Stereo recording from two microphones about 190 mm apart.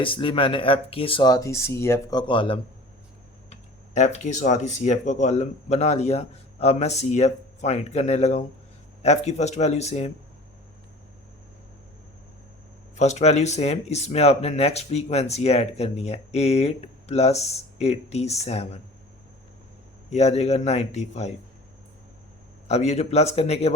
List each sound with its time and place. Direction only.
0.0 s speech: 25° left (ahead or behind)
3.5 s speech: 40° left (ahead or behind)
13.0 s speech: 35° left (ahead or behind)
20.1 s speech: 35° left (ahead or behind)
22.6 s speech: 35° left (ahead or behind)